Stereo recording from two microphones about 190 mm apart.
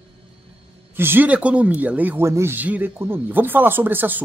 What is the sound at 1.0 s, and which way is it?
Speech, 10° right (ahead or behind).